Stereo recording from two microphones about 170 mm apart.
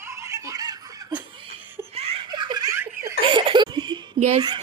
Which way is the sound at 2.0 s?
35° right (ahead or behind).